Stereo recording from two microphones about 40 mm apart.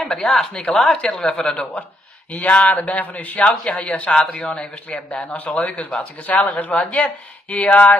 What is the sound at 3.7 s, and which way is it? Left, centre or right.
Speech, left.